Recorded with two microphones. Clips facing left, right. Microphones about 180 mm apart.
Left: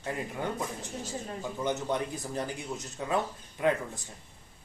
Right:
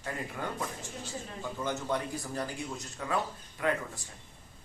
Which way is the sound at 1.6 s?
20° left (ahead or behind).